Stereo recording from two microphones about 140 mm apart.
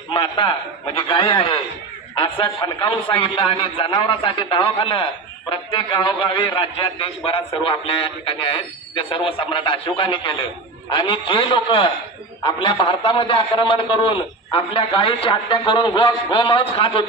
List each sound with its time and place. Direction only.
0.1 s a man's voice: 40° left (ahead or behind)